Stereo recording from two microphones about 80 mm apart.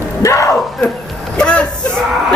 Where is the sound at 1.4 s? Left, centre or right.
Centre.